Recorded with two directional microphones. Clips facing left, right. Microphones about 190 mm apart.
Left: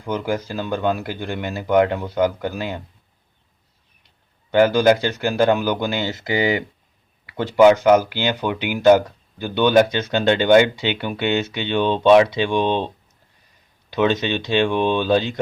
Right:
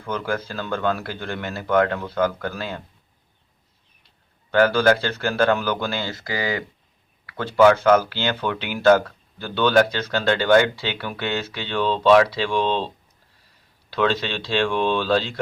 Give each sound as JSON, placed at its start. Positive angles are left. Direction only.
{"t": 0.0, "sound": "speech", "side_deg": 15}
{"t": 4.5, "sound": "speech", "side_deg": 20}
{"t": 13.9, "sound": "speech", "side_deg": 20}